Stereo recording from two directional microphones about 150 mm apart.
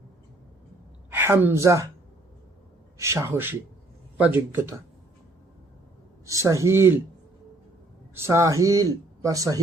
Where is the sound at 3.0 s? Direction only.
20° right (ahead or behind).